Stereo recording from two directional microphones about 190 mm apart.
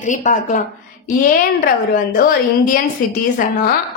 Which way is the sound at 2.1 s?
45° left (ahead or behind).